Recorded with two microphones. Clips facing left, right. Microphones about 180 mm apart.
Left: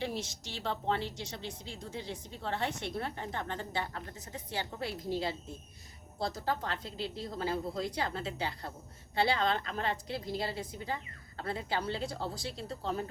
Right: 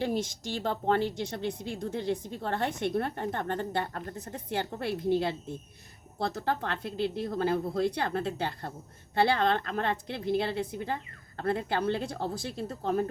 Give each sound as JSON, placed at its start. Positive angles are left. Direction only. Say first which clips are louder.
{"t": 0.0, "sound": "a woman's voice", "louder": "right 7 dB", "side_deg": -50}